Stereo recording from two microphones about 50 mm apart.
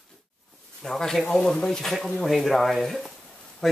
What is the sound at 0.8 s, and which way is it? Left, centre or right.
Speech, centre.